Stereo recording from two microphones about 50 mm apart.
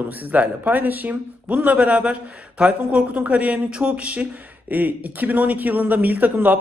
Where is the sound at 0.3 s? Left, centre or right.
Right.